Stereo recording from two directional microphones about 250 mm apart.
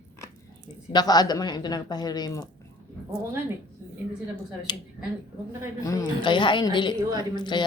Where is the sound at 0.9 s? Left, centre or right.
Centre.